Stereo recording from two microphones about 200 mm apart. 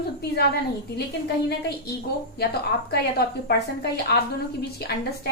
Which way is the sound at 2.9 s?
55° left (ahead or behind).